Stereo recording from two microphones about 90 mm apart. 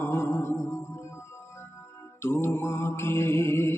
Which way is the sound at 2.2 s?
30° left (ahead or behind).